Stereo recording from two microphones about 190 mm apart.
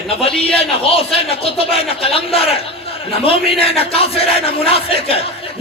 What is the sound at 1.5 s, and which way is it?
Battle cry, 30° left (ahead or behind).